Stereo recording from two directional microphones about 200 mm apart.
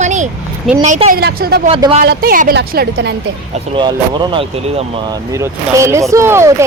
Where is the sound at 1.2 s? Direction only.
50° right (ahead or behind).